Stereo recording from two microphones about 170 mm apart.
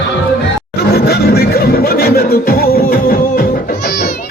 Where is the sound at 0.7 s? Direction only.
70° left (ahead or behind).